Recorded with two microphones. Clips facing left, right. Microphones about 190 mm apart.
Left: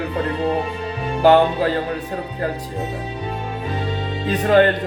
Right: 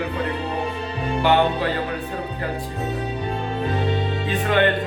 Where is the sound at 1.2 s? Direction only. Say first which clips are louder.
Left 6 dB; 40° left (ahead or behind).